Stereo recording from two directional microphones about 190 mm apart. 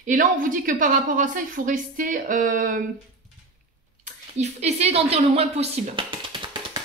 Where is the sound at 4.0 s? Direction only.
40° right (ahead or behind).